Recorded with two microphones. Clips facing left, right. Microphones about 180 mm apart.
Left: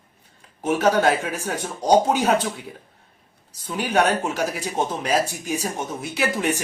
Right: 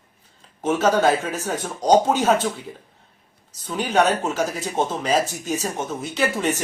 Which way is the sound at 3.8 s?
10° left (ahead or behind).